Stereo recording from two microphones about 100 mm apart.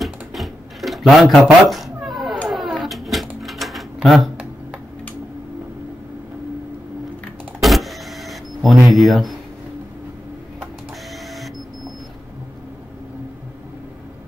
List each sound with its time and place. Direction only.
0.0 s typewriter: centre (ahead or behind)
1.6 s cat: centre (ahead or behind)
7.6 s vehicle: centre (ahead or behind)
8.8 s speech: centre (ahead or behind)
11.2 s printer: centre (ahead or behind)